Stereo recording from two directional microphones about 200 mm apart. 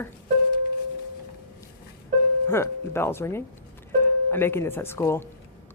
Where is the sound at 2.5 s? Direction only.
10° left (ahead or behind).